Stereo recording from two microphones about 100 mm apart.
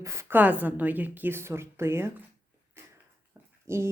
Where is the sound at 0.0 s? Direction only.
30° right (ahead or behind).